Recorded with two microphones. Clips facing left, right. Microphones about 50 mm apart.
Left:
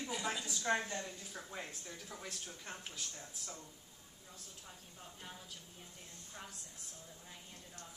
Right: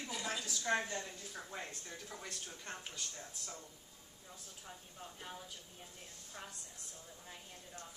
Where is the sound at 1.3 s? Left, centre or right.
Centre.